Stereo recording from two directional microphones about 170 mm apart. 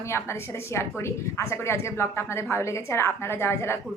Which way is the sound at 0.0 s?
15° left (ahead or behind).